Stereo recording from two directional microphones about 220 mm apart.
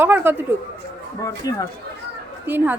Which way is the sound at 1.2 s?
15° left (ahead or behind).